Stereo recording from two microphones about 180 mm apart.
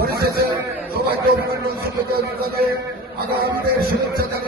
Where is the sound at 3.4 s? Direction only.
60° right (ahead or behind).